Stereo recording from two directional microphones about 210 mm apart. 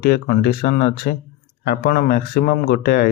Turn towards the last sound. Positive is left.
turn(degrees=45)  # may be behind; listen again after turning